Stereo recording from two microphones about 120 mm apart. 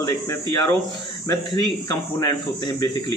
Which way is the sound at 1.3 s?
30° left (ahead or behind).